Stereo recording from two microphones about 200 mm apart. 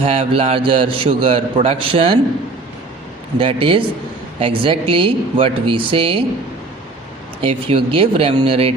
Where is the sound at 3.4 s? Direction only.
25° right (ahead or behind).